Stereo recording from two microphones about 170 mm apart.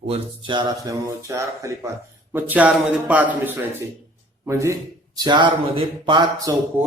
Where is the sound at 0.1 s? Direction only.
30° right (ahead or behind).